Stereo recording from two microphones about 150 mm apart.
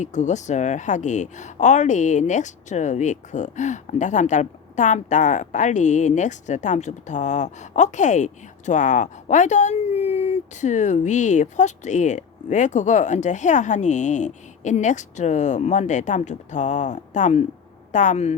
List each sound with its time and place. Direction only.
0.0 s speech: 55° left (ahead or behind)